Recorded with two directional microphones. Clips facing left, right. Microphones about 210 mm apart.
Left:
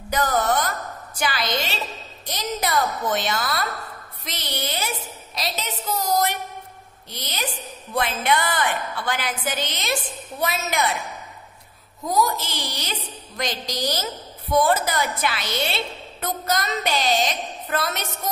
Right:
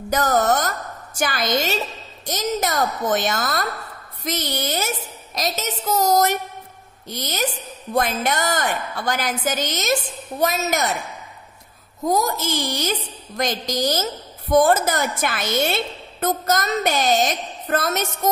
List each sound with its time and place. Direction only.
0.1 s a woman's voice: 45° right (ahead or behind)
12.0 s a woman's voice: 45° right (ahead or behind)